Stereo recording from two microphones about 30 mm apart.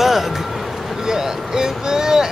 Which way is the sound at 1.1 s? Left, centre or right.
Right.